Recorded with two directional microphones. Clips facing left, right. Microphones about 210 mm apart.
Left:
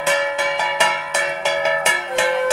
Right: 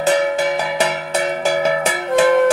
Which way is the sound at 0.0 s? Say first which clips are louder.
Right 4 dB; 40° right (ahead or behind).